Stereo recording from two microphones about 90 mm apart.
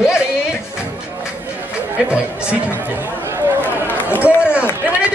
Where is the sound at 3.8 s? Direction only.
20° left (ahead or behind).